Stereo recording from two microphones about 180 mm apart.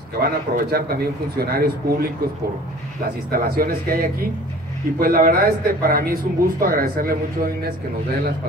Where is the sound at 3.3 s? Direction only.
55° right (ahead or behind).